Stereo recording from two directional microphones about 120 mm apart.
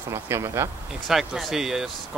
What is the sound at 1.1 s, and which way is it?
Speech, 5° right (ahead or behind).